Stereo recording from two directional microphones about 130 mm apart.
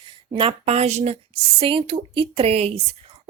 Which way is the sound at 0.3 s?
50° right (ahead or behind).